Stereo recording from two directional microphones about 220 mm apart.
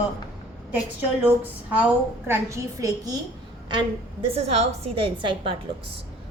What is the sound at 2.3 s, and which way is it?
Speech, 15° right (ahead or behind).